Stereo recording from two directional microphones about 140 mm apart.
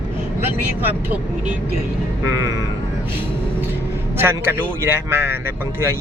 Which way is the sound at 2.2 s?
20° right (ahead or behind).